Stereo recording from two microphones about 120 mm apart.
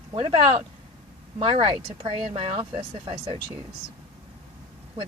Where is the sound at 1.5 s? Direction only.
50° right (ahead or behind).